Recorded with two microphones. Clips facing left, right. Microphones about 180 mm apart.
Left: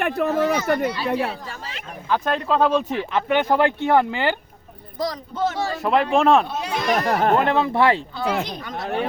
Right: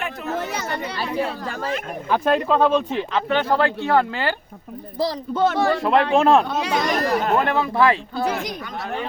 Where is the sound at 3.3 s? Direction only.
15° left (ahead or behind).